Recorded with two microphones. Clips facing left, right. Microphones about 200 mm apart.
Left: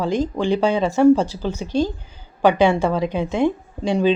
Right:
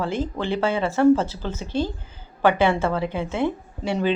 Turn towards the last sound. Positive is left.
turn(degrees=15)  # may be behind; listen again after turning